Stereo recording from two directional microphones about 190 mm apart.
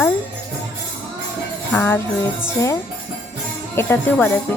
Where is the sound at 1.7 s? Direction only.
10° left (ahead or behind).